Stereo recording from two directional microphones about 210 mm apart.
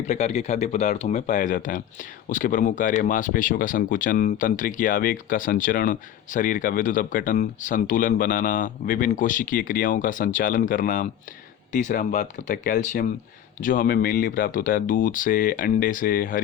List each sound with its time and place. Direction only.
0.0 s speech: 30° left (ahead or behind)